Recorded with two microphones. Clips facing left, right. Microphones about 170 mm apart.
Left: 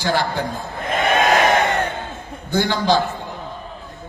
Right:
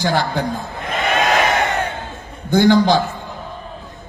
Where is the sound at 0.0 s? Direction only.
60° right (ahead or behind).